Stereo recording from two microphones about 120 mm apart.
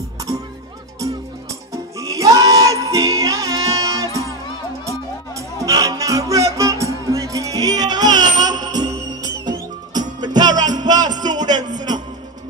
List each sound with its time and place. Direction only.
0.3 s music: 30° right (ahead or behind)